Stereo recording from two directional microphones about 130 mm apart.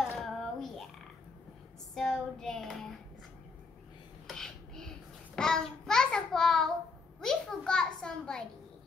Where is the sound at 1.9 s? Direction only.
5° left (ahead or behind).